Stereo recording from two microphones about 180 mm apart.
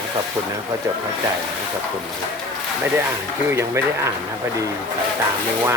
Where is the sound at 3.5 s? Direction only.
15° right (ahead or behind).